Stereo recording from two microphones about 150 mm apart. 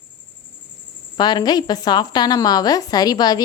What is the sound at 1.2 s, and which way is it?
Speech, 30° left (ahead or behind).